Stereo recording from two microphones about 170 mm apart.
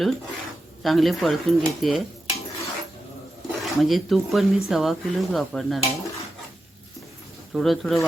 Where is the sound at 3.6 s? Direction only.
Centre (ahead or behind).